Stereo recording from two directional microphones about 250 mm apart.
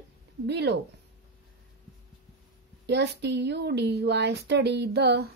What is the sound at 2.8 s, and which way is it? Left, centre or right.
Speech, right.